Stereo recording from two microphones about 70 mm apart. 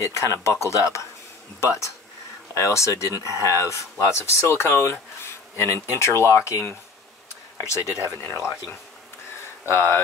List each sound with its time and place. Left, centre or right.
0.0 s speech: left
9.7 s speech: left